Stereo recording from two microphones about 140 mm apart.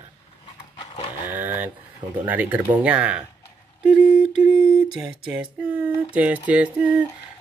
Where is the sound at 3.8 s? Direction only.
10° right (ahead or behind).